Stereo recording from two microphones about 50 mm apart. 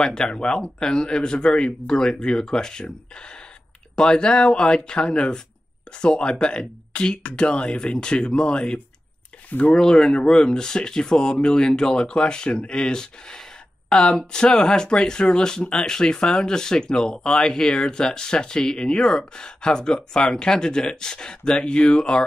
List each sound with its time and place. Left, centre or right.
0.0 s speech: centre
9.5 s speech: left
9.8 s speech: centre